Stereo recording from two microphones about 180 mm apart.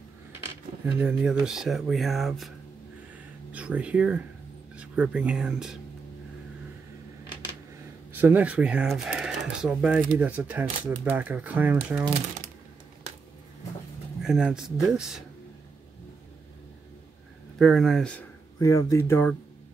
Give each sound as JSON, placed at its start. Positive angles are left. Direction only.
{"t": 1.0, "sound": "speech", "side_deg": -5}
{"t": 3.5, "sound": "speech", "side_deg": -5}
{"t": 8.1, "sound": "speech", "side_deg": -10}
{"t": 14.2, "sound": "speech", "side_deg": -5}
{"t": 17.6, "sound": "speech", "side_deg": 0}
{"t": 18.6, "sound": "speech", "side_deg": 15}